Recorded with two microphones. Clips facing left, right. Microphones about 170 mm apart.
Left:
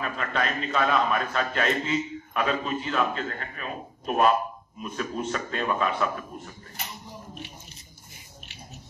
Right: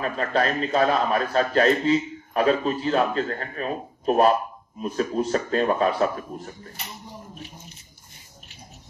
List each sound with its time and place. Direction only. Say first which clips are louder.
0.0 s a man's voice: right 5 dB; 35° right (ahead or behind)